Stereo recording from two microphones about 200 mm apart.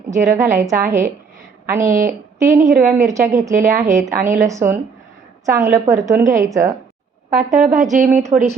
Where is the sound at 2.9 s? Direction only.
10° right (ahead or behind).